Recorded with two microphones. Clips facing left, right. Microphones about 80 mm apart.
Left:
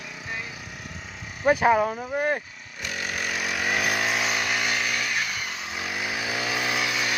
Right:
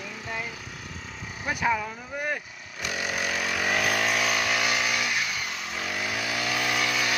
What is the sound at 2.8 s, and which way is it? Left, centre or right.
Chainsaw, centre.